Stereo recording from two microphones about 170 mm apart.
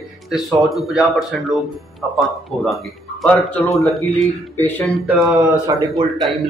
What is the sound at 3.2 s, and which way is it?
Speech, 5° left (ahead or behind).